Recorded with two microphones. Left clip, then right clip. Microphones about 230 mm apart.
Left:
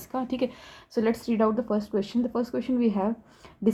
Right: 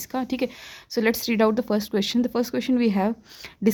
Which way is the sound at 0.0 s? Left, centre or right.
Right.